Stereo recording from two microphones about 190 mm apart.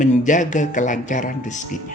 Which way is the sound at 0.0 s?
40° left (ahead or behind).